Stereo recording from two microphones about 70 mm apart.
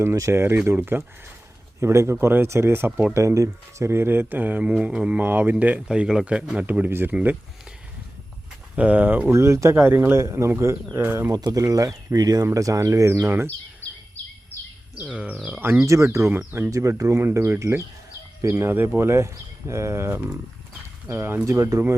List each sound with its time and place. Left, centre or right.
0.0 s speech: right
5.9 s speech: centre; by 7.3 s right
8.7 s speech: centre
9.3 s speech: right
10.9 s speech: right
11.3 s speech: right
11.6 s speech: right
12.5 s speech: right
13.2 s speech: right
13.8 s bird vocalization: left
15.0 s speech: centre
15.8 s speech: right
16.3 s speech: right
17.0 s speech: right